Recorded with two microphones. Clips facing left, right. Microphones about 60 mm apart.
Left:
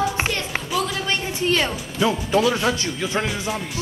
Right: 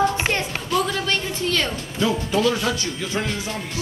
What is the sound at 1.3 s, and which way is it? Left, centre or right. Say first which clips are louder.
Speech: left 2 dB; left.